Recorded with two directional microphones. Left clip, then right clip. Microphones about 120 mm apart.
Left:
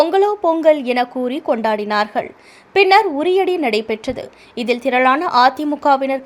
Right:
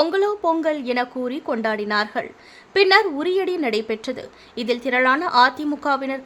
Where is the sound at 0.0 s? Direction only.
25° left (ahead or behind).